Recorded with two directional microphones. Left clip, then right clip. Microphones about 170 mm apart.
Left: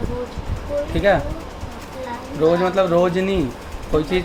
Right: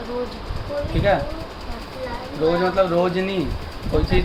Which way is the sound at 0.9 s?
45° left (ahead or behind).